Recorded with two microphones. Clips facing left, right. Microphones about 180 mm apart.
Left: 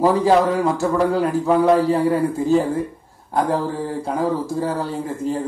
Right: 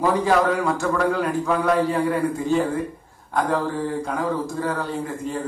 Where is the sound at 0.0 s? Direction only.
35° left (ahead or behind).